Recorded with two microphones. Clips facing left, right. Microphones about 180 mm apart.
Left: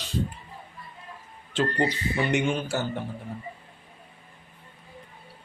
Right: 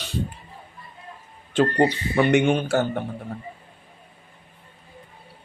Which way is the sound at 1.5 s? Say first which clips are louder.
Right 6 dB; 60° right (ahead or behind).